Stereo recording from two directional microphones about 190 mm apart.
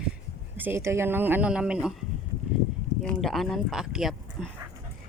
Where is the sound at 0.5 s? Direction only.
10° right (ahead or behind).